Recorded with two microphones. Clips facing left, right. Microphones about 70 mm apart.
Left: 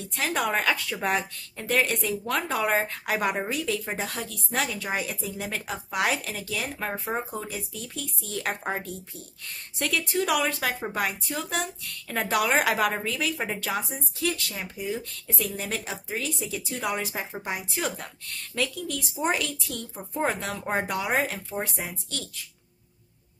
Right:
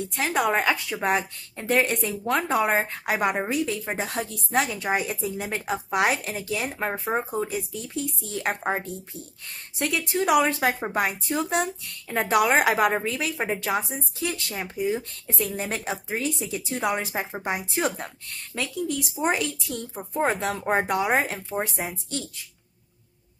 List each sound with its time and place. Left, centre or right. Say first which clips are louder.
0.1 s speech: left 1 dB; centre
0.4 s a woman's voice: right 3 dB; centre